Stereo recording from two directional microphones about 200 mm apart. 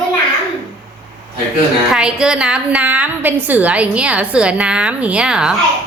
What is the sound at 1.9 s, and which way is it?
A woman's voice, 5° right (ahead or behind).